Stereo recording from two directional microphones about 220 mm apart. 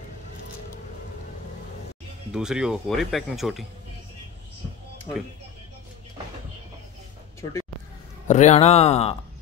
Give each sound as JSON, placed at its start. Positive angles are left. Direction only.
{"t": 2.3, "sound": "speech", "side_deg": -5}
{"t": 8.3, "sound": "speech", "side_deg": 30}